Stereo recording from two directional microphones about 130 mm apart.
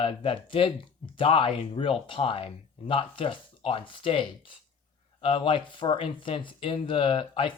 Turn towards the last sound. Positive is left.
turn(degrees=40)  # may be behind; listen again after turning